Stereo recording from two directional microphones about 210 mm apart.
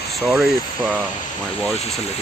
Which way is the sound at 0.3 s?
5° right (ahead or behind).